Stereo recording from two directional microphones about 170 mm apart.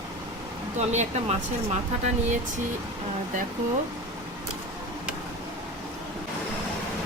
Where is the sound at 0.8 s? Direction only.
40° right (ahead or behind).